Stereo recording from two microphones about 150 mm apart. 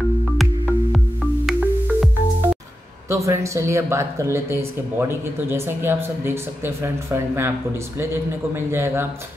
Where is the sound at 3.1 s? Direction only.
20° right (ahead or behind).